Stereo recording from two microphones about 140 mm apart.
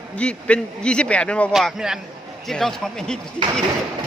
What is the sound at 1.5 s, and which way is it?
Speech, 5° right (ahead or behind).